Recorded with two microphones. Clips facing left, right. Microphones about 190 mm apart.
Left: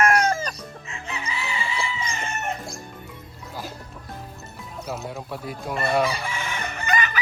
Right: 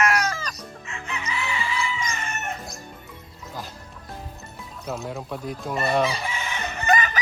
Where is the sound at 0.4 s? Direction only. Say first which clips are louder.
Left 2 dB; 35° left (ahead or behind).